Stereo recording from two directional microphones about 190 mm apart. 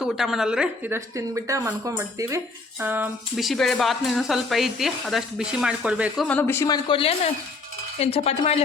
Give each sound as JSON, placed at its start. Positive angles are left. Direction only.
{"t": 0.0, "sound": "speech", "side_deg": 0}
{"t": 6.2, "sound": "speech", "side_deg": 10}
{"t": 7.9, "sound": "cutlery", "side_deg": 35}